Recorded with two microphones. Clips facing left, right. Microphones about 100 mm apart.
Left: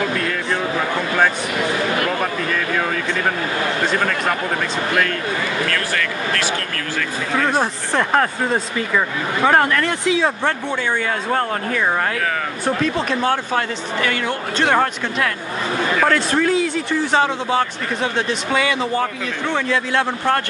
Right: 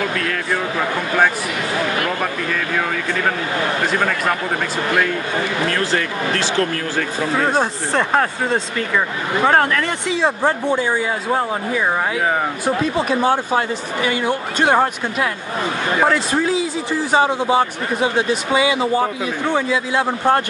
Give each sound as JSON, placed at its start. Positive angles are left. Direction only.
{"t": 5.7, "sound": "speech", "side_deg": -25}
{"t": 7.5, "sound": "speech", "side_deg": 0}
{"t": 10.4, "sound": "a man's voice", "side_deg": -10}
{"t": 16.3, "sound": "a man's voice", "side_deg": -5}